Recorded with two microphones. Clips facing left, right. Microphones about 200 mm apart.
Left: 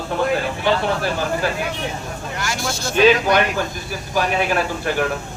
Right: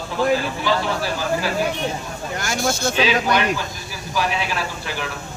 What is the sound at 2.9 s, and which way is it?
Speech, 50° left (ahead or behind).